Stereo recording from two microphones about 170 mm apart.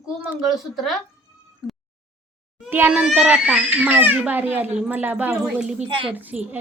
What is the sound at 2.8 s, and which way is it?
A child's voice, 5° right (ahead or behind).